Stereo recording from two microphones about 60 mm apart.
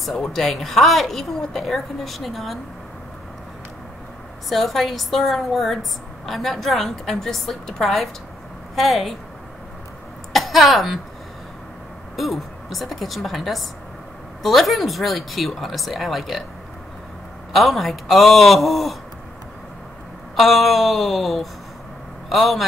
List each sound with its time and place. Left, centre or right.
0.0 s a woman's voice: centre
4.5 s a woman's voice: centre
10.3 s speech: centre
12.2 s a woman's voice: centre
17.5 s a woman's voice: centre
20.3 s a woman's voice: centre